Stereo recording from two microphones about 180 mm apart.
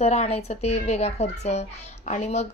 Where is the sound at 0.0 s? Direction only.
35° left (ahead or behind).